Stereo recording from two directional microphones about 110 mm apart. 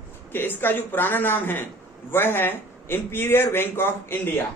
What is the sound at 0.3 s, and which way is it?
A man's voice, 20° left (ahead or behind).